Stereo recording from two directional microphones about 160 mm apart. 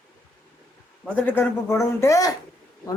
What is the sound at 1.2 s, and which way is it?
Speech, 10° left (ahead or behind).